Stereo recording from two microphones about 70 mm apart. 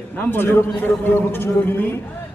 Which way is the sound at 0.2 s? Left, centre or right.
Left.